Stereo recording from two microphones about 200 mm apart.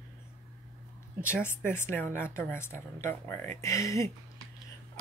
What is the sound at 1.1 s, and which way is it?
Speech, 10° left (ahead or behind).